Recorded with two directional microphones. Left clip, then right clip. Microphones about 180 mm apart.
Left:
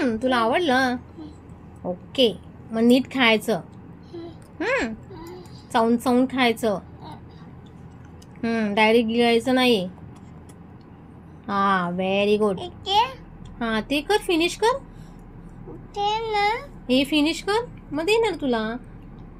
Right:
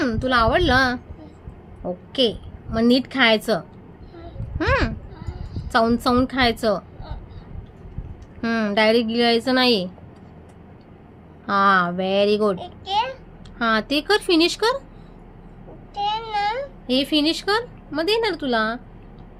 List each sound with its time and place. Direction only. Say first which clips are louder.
0.0 s a woman's voice: right 2 dB; 15° right (ahead or behind)
5.1 s a sound: left 1 dB; 5° right (ahead or behind)
5.7 s a woman's voice: right 2 dB; 20° right (ahead or behind)
8.4 s a woman's voice: right 1 dB; 25° right (ahead or behind)
11.4 s a woman's voice: right 5 dB; 20° right (ahead or behind)
12.5 s a sound: left 2 dB; centre (ahead or behind)
13.6 s a woman's voice: right 5 dB; 20° right (ahead or behind)
16.0 s a child's voice: left 1 dB; 10° right (ahead or behind)